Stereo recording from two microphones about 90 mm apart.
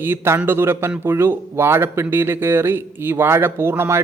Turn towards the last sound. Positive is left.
turn(degrees=-30)  # may be behind; listen again after turning